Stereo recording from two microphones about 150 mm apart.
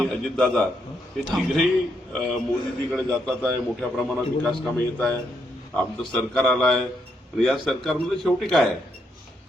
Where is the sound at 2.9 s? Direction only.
5° left (ahead or behind).